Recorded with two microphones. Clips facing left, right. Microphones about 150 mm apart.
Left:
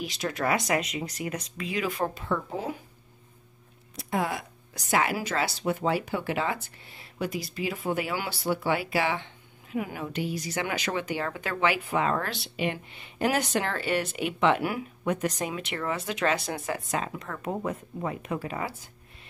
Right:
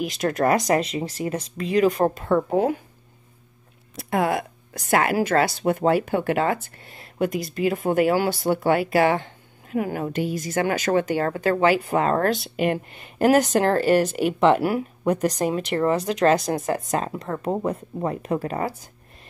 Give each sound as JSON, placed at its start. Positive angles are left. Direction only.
{"t": 0.0, "sound": "speech", "side_deg": -50}
{"t": 3.9, "sound": "a woman's voice", "side_deg": -60}